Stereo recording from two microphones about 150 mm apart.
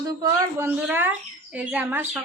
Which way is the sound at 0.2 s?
20° right (ahead or behind).